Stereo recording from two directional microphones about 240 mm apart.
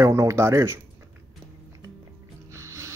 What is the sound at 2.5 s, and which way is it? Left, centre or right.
Music, centre.